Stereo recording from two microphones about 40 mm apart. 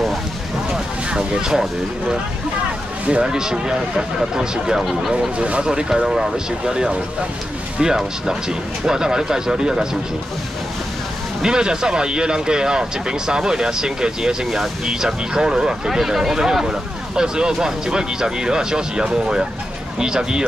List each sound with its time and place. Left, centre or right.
1.1 s speech: centre
5.4 s speech: right
5.7 s speech: centre
11.4 s speech: centre